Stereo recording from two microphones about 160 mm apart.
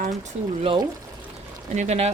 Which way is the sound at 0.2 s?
50° right (ahead or behind).